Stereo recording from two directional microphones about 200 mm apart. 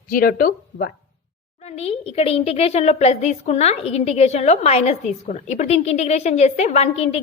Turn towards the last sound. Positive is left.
turn(degrees=30)  # may be behind; listen again after turning